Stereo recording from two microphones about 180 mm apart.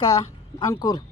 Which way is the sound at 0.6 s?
20° left (ahead or behind).